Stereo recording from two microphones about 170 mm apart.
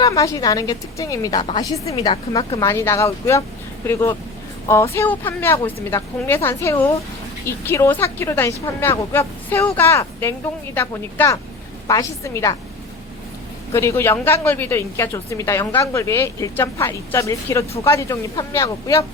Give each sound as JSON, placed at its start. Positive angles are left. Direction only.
{"t": 0.0, "sound": "a woman's voice", "side_deg": 20}
{"t": 4.7, "sound": "a woman's voice", "side_deg": 15}
{"t": 13.7, "sound": "a woman's voice", "side_deg": 15}